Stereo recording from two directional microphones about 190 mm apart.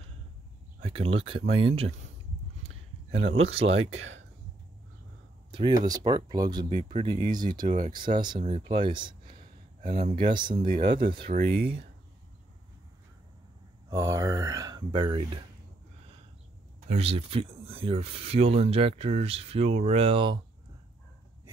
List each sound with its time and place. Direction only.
0.8 s speech: 30° right (ahead or behind)
2.7 s a sound: 90° right
3.3 s speech: 30° right (ahead or behind)
3.9 s speech: 90° right
5.5 s speech: 25° right (ahead or behind)
7.6 s speech: 40° right (ahead or behind)
7.9 s speech: 25° right (ahead or behind)
8.8 s a sound: 25° right (ahead or behind)
9.8 s speech: 50° right (ahead or behind)
10.3 s speech: 25° right (ahead or behind)
11.3 s speech: 55° right (ahead or behind)
13.8 s speech: 15° right (ahead or behind)
16.9 s speech: 30° right (ahead or behind)